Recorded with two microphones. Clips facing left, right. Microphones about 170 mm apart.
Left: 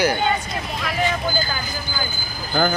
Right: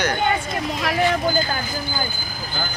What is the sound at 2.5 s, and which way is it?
Speech, 55° left (ahead or behind).